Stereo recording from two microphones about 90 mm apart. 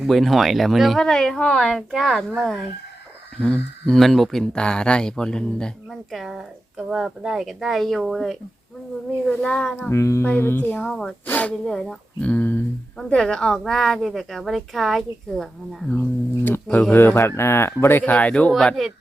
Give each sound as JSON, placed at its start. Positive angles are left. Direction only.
{"t": 0.0, "sound": "speech", "side_deg": 0}
{"t": 9.2, "sound": "speech", "side_deg": 10}
{"t": 9.9, "sound": "music", "side_deg": 35}
{"t": 10.2, "sound": "speech", "side_deg": 20}
{"t": 10.8, "sound": "speech", "side_deg": 5}
{"t": 11.3, "sound": "speech", "side_deg": 15}
{"t": 11.6, "sound": "speech", "side_deg": 5}
{"t": 16.9, "sound": "speech", "side_deg": 25}
{"t": 18.5, "sound": "speech", "side_deg": 0}